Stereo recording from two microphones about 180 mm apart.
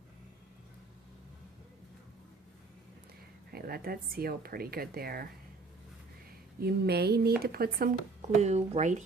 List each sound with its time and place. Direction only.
3.5 s speech: 55° right (ahead or behind)
6.6 s speech: 60° right (ahead or behind)
8.2 s speech: 40° right (ahead or behind)